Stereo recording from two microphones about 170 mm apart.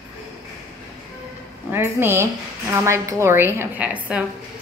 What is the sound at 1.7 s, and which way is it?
A woman's voice, 15° right (ahead or behind).